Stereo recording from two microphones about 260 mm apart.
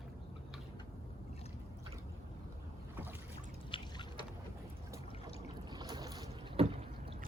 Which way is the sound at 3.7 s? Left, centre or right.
Centre.